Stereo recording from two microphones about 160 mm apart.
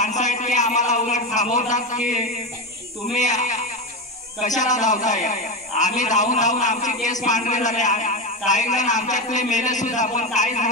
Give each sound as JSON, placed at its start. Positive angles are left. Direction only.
{"t": 0.0, "sound": "a man's voice", "side_deg": 50}